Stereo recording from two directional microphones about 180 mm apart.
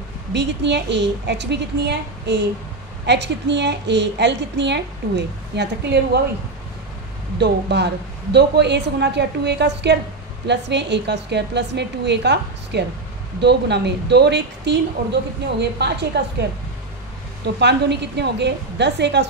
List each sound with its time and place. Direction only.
0.3 s a woman's voice: 75° right (ahead or behind)
7.3 s a woman's voice: 70° right (ahead or behind)
15.8 s a woman's voice: 70° right (ahead or behind)
17.6 s a woman's voice: 70° right (ahead or behind)